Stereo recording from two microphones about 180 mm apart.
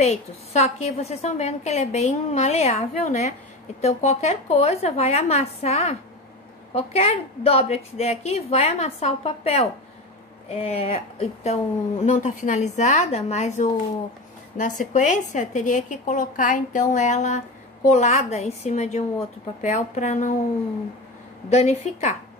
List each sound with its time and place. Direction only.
0.0 s a woman's voice: 35° left (ahead or behind)
21.5 s a woman's voice: 40° left (ahead or behind)